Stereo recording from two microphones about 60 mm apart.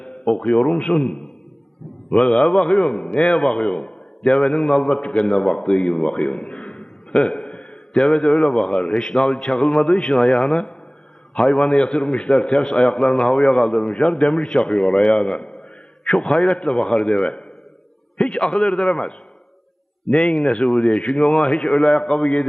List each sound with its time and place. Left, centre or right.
0.0 s a sound: centre
0.5 s a man's voice: centre
18.2 s a man's voice: centre
20.3 s a man's voice: centre
21.4 s a man's voice: centre